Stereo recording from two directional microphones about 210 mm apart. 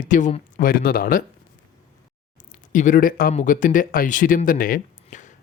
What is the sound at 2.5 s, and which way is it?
Speech, 35° left (ahead or behind).